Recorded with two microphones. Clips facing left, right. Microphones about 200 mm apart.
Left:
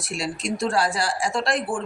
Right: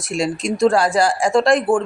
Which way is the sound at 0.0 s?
45° right (ahead or behind).